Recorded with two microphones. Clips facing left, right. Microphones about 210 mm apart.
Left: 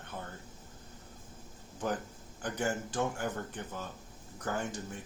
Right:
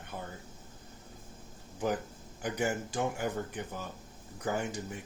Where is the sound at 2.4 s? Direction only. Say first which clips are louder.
Right 2 dB; 10° right (ahead or behind).